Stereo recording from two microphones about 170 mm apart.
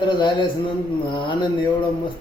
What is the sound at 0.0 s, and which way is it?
Speech, 30° left (ahead or behind).